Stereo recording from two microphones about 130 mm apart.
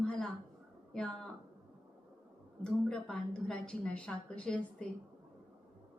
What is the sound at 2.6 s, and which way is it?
A woman's voice, 5° left (ahead or behind).